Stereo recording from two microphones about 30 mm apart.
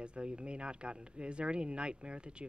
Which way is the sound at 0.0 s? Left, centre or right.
Right.